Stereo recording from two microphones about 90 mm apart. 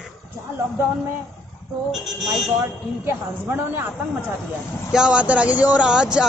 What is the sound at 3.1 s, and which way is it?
Speech, 30° right (ahead or behind).